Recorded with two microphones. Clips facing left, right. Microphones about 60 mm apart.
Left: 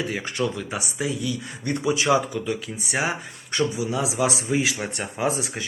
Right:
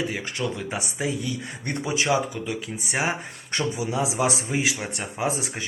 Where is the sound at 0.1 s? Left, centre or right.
Centre.